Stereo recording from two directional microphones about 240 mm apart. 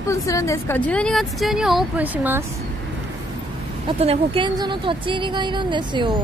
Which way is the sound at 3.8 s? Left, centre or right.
Right.